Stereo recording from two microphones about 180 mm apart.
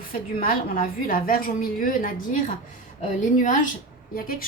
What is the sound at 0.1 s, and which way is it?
A woman's voice, 55° left (ahead or behind).